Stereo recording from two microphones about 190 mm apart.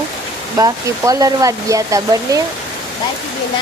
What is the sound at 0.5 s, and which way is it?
Speech, 20° right (ahead or behind).